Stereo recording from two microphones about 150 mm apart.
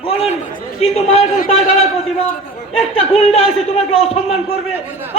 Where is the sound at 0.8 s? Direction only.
45° left (ahead or behind).